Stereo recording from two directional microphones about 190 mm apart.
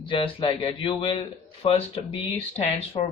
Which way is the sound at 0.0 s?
25° left (ahead or behind).